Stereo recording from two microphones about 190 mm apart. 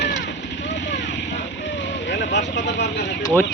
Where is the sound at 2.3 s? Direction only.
65° left (ahead or behind).